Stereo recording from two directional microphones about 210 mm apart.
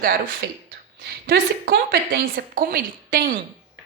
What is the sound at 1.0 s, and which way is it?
A woman's voice, 45° right (ahead or behind).